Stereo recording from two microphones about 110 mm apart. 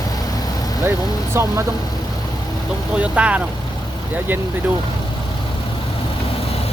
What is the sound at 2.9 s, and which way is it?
Speech, 10° right (ahead or behind).